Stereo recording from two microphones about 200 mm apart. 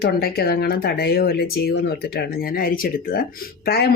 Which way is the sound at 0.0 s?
50° left (ahead or behind).